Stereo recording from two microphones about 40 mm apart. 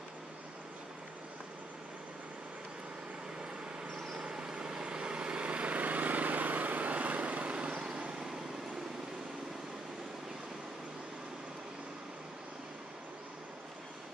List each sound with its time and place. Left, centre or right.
4.2 s vehicle: centre